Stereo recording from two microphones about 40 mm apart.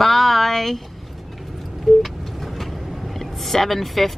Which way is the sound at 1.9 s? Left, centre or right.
Centre.